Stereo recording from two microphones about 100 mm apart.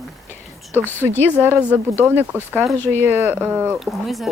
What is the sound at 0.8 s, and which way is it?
Speech, 20° left (ahead or behind).